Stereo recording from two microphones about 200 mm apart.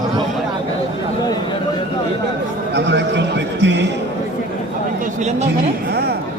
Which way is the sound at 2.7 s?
60° right (ahead or behind).